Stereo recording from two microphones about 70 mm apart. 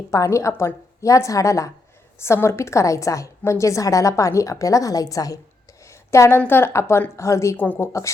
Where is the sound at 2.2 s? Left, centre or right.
Left.